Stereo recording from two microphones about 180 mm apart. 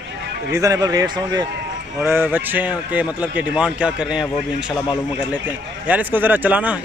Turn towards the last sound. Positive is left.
turn(degrees=-10)  # may be behind; listen again after turning